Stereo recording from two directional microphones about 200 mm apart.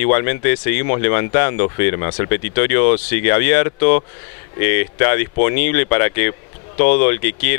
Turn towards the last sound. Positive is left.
turn(degrees=15)  # may be behind; listen again after turning